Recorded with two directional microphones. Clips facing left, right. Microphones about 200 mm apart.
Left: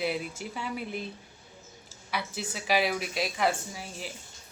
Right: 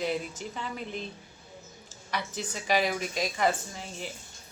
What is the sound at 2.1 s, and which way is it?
A woman's voice, 5° left (ahead or behind).